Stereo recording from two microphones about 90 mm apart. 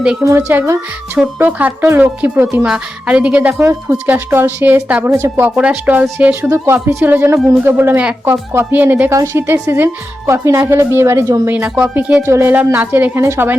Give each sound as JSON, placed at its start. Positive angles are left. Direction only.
{"t": 0.2, "sound": "speech", "side_deg": -30}
{"t": 2.6, "sound": "speech", "side_deg": -10}
{"t": 3.6, "sound": "speech", "side_deg": -35}
{"t": 3.9, "sound": "speech", "side_deg": -20}
{"t": 5.5, "sound": "speech", "side_deg": -15}
{"t": 9.0, "sound": "speech", "side_deg": -30}
{"t": 11.4, "sound": "speech", "side_deg": -20}
{"t": 12.2, "sound": "speech", "side_deg": -30}